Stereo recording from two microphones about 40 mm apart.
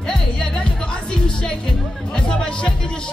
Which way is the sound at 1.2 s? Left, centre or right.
Left.